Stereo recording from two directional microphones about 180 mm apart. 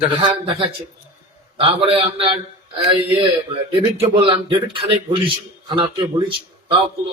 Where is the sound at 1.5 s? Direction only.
30° right (ahead or behind).